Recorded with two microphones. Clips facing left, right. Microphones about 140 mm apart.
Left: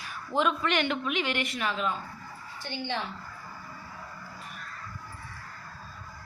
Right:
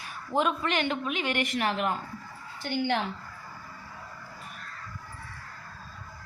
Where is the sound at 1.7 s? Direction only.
60° right (ahead or behind).